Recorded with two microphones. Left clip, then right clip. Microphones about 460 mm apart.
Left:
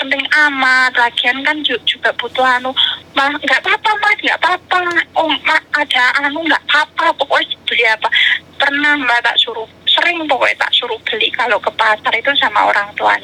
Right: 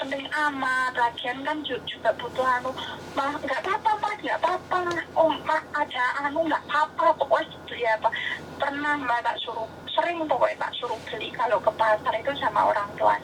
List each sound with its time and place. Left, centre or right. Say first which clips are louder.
0.0 s a woman's voice: left 14 dB; left